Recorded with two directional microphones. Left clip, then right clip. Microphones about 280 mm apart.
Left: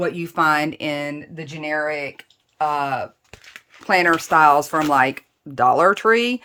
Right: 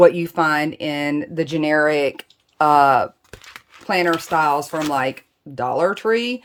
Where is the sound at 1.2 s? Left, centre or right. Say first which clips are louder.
Right 11 dB; centre.